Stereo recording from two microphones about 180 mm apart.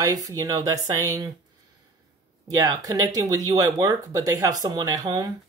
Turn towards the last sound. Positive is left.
turn(degrees=-20)  # may be behind; listen again after turning